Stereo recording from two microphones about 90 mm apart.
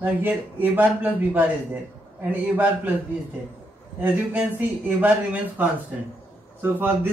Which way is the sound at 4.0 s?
20° right (ahead or behind).